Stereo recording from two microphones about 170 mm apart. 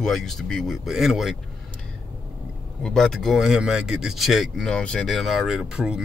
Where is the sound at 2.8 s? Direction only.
Centre (ahead or behind).